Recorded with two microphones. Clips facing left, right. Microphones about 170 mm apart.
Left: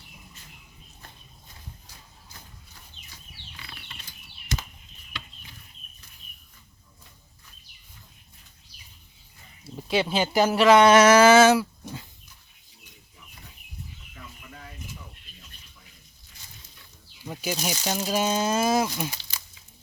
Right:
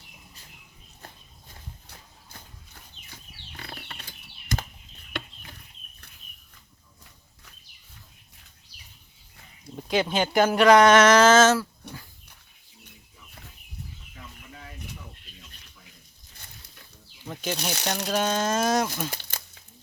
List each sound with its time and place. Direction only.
3.6 s bird flight: 50° right (ahead or behind)
5.1 s chicken: 55° right (ahead or behind)
9.6 s speech: 5° left (ahead or behind)
17.2 s snake: 10° left (ahead or behind)
17.8 s speech: 10° left (ahead or behind)
19.1 s crumpling: 55° right (ahead or behind)